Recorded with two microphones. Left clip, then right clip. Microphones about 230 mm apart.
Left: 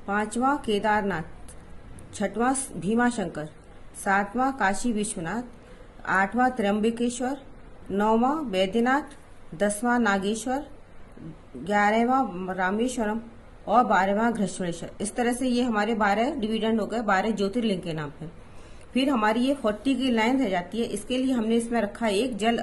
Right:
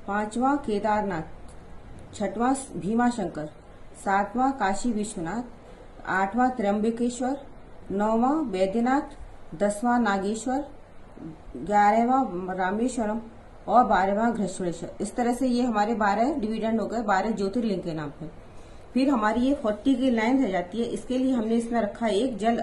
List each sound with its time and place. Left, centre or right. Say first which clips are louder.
0.0 s a woman's voice: left 1 dB; left
2.2 s a woman's voice: even; left
11.9 s a woman's voice: right 1 dB; left